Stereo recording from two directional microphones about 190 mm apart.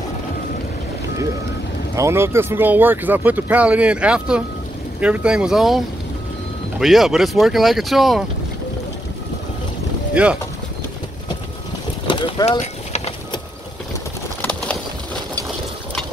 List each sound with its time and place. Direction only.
2.0 s speech: 15° right (ahead or behind)
6.8 s speech: centre (ahead or behind)
10.2 s speech: 5° right (ahead or behind)
12.1 s clip-clop: 25° left (ahead or behind)
14.4 s bird: 5° left (ahead or behind)